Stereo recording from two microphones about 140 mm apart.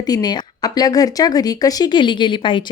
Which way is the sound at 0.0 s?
30° left (ahead or behind).